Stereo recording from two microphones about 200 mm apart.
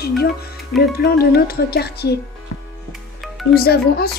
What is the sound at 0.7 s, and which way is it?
Speech, 50° left (ahead or behind).